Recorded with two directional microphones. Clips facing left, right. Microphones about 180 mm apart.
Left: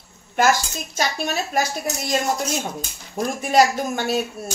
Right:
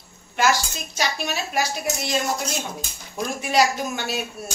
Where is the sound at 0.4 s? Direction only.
50° left (ahead or behind).